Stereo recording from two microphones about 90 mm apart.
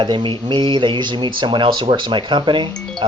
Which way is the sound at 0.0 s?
65° right (ahead or behind).